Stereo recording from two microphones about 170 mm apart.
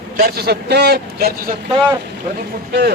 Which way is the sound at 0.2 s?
65° right (ahead or behind).